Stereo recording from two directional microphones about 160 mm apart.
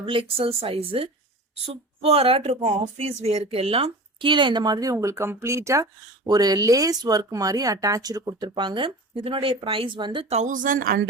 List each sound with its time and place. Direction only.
0.0 s speech: 35° right (ahead or behind)
10.2 s speech: 45° right (ahead or behind); by 11.1 s 70° right (ahead or behind)